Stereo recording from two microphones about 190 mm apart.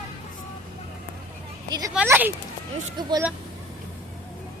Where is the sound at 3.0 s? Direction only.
25° right (ahead or behind).